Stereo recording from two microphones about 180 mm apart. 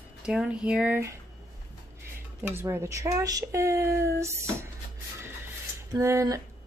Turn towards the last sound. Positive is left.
turn(degrees=-15)  # may be behind; listen again after turning